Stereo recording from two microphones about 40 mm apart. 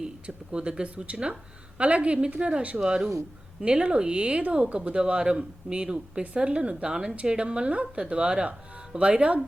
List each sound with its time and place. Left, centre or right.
0.0 s a woman's voice: right